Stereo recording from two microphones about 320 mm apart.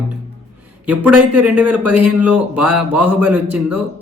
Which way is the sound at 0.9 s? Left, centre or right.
Centre.